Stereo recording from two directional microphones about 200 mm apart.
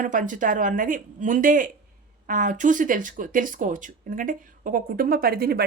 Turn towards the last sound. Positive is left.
turn(degrees=-50)  # may be behind; listen again after turning